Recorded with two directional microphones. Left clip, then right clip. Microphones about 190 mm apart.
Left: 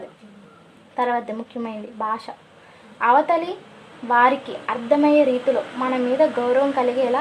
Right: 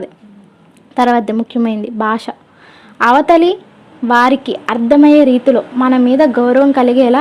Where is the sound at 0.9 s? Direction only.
45° right (ahead or behind).